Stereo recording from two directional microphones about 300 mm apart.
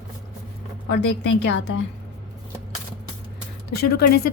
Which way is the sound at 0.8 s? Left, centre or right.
Left.